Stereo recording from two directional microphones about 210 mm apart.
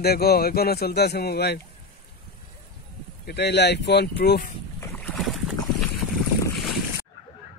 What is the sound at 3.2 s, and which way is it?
Speech, 55° left (ahead or behind).